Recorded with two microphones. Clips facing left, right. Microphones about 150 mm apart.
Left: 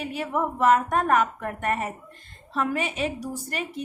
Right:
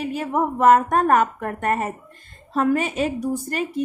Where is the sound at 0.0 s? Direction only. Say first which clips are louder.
Right 4 dB; 40° right (ahead or behind).